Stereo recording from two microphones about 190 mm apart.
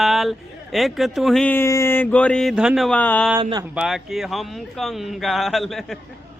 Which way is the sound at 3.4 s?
20° right (ahead or behind).